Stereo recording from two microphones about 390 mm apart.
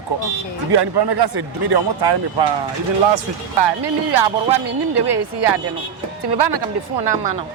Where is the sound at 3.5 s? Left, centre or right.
Right.